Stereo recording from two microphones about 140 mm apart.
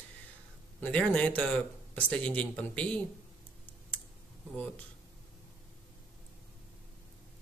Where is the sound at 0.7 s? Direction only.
10° left (ahead or behind).